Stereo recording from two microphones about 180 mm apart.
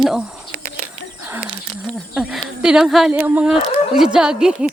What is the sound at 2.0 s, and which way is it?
Speech, 5° right (ahead or behind).